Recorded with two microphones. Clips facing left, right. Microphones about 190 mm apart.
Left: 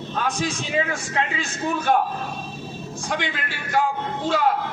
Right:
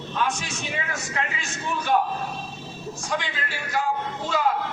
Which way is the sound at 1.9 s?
55° left (ahead or behind).